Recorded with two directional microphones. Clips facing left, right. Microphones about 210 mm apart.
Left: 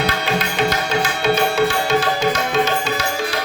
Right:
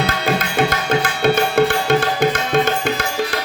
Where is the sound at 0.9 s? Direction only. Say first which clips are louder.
Right 2 dB; 55° right (ahead or behind).